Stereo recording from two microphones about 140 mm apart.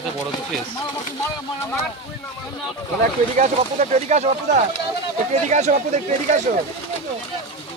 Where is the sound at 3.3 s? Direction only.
60° right (ahead or behind).